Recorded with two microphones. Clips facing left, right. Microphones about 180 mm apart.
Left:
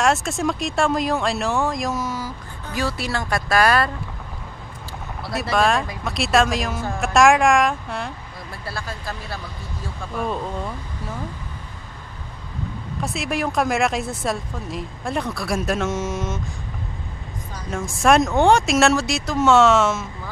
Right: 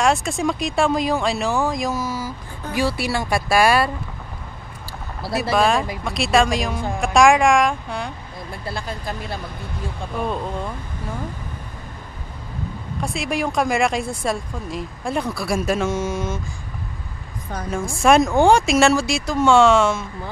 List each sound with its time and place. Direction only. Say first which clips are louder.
0.0 s speech: right 1 dB; centre (ahead or behind)
5.3 s speech: right 1 dB; centre (ahead or behind)
8.6 s speech: right 2 dB; 20° right (ahead or behind)
13.0 s speech: right 1 dB; centre (ahead or behind)
17.6 s speech: right 1 dB; centre (ahead or behind)